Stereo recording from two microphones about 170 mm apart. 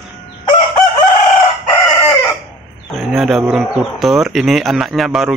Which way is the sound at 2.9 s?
Centre (ahead or behind).